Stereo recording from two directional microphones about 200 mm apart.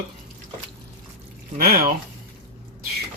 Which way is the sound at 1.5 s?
45° right (ahead or behind).